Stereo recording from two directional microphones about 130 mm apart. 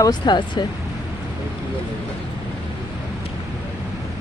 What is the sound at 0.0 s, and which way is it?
Speech, 35° left (ahead or behind).